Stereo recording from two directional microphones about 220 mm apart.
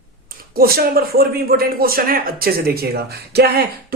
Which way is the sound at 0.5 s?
45° right (ahead or behind).